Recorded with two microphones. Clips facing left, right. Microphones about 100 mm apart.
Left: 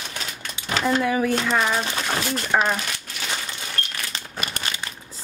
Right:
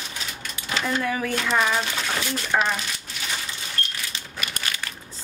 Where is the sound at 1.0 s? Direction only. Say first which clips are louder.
Left 4 dB; 20° left (ahead or behind).